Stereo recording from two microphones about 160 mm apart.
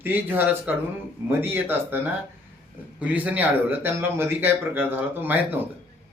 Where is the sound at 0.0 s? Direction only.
10° right (ahead or behind).